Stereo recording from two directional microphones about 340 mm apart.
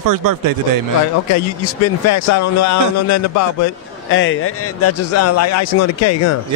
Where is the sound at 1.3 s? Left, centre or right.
Left.